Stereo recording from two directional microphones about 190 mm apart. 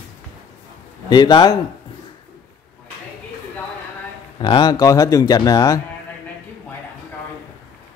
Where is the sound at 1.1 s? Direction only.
25° left (ahead or behind).